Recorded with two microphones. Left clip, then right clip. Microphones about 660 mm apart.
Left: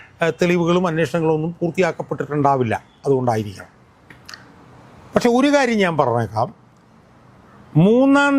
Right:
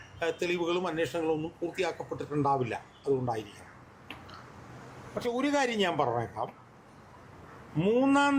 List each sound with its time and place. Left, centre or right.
0.2 s speech: left
5.2 s speech: left
7.8 s speech: left